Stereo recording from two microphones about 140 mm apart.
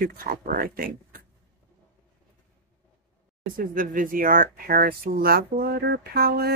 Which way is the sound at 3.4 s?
85° right.